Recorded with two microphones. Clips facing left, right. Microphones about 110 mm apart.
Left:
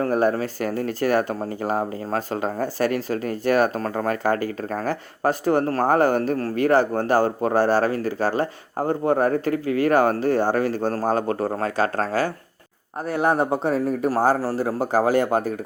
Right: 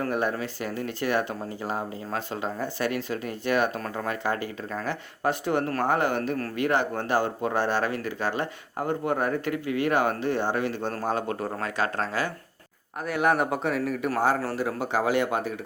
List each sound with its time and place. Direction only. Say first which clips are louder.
0.0 s speech: left 7 dB; 40° left (ahead or behind)